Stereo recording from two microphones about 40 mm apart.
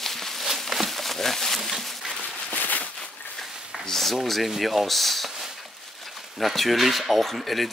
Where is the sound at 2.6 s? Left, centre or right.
Left.